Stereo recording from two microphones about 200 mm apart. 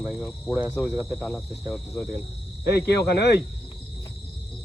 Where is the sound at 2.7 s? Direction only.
55° left (ahead or behind).